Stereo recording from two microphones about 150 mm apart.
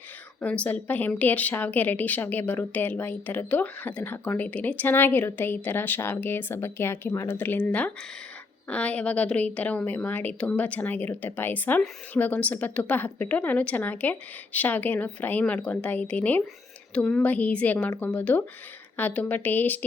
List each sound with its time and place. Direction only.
0.4 s a woman's voice: 10° left (ahead or behind)